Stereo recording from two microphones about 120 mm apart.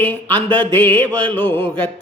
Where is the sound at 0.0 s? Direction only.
15° left (ahead or behind).